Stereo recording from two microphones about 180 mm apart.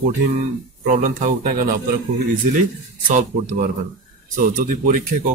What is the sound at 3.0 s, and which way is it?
Speech, 45° right (ahead or behind).